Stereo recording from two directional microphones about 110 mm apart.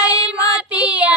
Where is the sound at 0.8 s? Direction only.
10° right (ahead or behind).